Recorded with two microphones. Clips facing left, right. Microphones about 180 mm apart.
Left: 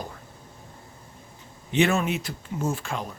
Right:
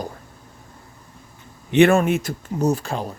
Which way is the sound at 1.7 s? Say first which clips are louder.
Right 8 dB; 55° right (ahead or behind).